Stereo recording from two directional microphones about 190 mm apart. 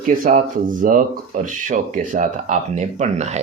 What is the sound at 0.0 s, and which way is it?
A man's voice, 45° right (ahead or behind).